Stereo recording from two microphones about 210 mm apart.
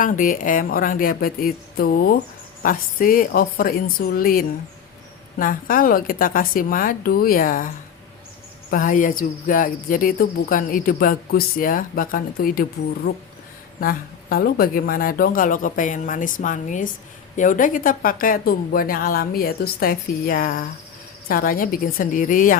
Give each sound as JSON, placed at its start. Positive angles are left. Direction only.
{"t": 0.0, "sound": "speech", "side_deg": 40}
{"t": 8.7, "sound": "speech", "side_deg": 40}
{"t": 13.7, "sound": "speech", "side_deg": 45}